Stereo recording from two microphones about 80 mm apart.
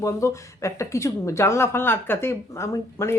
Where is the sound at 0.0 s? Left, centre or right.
Left.